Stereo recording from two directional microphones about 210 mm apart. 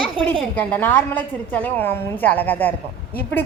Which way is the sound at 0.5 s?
10° left (ahead or behind).